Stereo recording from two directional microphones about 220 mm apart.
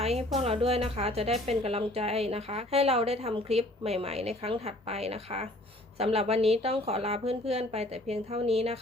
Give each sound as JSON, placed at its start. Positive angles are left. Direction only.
{"t": 0.0, "sound": "a woman's voice", "side_deg": -30}